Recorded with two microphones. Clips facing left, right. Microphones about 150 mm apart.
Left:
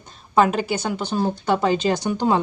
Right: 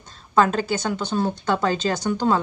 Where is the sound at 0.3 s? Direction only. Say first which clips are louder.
Left 1 dB; 10° left (ahead or behind).